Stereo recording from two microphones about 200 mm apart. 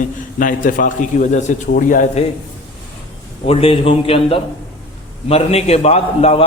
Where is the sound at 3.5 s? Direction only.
30° left (ahead or behind).